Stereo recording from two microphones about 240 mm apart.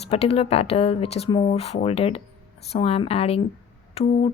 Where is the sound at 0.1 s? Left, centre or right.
Left.